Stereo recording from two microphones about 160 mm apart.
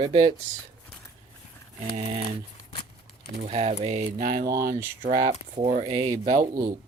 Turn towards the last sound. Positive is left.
turn(degrees=-55)  # may be behind; listen again after turning